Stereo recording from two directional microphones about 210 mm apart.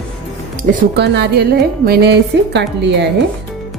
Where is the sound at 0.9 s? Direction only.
55° right (ahead or behind).